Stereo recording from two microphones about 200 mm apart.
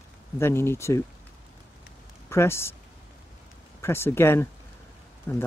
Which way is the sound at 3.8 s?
10° left (ahead or behind).